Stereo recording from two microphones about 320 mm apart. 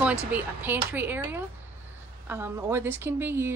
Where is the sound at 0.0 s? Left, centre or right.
Centre.